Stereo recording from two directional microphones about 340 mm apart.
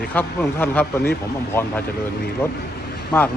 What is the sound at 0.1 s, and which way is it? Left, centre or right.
Speech, centre.